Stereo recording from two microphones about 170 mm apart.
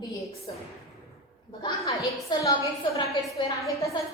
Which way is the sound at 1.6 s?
25° left (ahead or behind).